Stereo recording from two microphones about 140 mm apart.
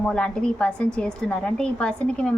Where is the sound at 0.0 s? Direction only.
5° left (ahead or behind).